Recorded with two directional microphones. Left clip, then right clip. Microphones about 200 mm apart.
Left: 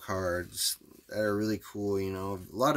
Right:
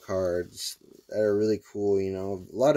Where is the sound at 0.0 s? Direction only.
20° left (ahead or behind).